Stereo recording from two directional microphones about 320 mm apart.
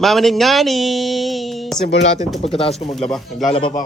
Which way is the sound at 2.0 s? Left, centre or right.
Left.